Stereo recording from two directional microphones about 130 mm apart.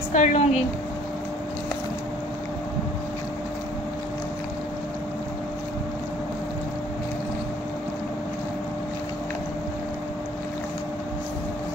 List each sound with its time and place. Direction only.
0.1 s a woman's voice: 70° left (ahead or behind)